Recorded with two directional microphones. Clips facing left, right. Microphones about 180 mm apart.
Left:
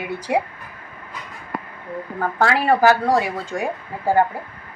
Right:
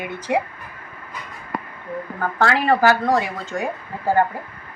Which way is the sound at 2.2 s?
10° left (ahead or behind).